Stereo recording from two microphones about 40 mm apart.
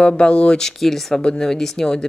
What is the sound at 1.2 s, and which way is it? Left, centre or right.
Speech, left.